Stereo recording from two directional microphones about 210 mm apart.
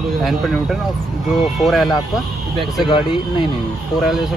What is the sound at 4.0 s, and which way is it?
Speech, centre (ahead or behind).